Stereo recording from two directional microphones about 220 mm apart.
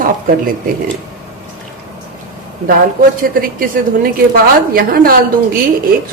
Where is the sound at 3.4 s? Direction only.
40° right (ahead or behind).